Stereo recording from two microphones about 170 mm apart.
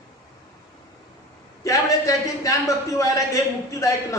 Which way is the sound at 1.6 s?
20° left (ahead or behind).